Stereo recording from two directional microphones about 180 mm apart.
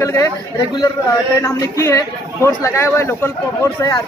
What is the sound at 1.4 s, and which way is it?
Speech, 15° left (ahead or behind).